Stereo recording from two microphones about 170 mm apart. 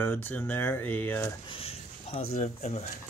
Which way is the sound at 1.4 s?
35° left (ahead or behind).